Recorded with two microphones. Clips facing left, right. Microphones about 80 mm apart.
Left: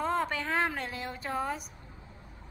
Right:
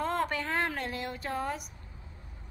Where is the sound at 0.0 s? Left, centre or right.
Centre.